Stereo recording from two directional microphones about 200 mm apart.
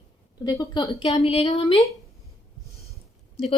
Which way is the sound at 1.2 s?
30° left (ahead or behind).